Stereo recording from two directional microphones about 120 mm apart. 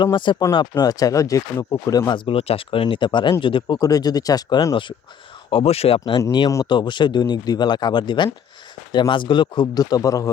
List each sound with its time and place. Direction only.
0.0 s speech: 40° left (ahead or behind)
5.5 s speech: 55° left (ahead or behind)
6.7 s speech: 40° left (ahead or behind)